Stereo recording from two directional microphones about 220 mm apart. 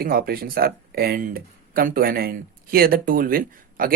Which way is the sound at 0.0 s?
45° right (ahead or behind).